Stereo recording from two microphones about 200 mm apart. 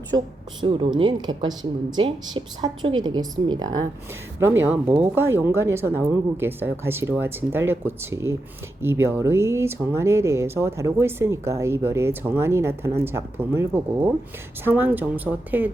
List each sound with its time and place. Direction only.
0.6 s speech: 25° right (ahead or behind)
4.6 s speech: 10° right (ahead or behind)